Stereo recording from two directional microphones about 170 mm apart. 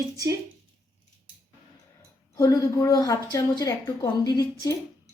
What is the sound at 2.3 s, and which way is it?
A woman's voice, 20° left (ahead or behind).